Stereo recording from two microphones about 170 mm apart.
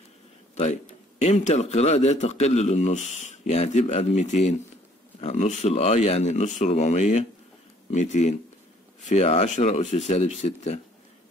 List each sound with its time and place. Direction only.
1.2 s a man's voice: 40° left (ahead or behind)